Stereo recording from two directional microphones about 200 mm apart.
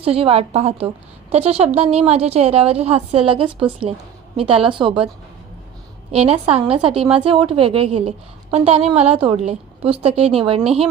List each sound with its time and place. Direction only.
0.0 s a woman's voice: 30° right (ahead or behind)
6.1 s a woman's voice: 30° right (ahead or behind)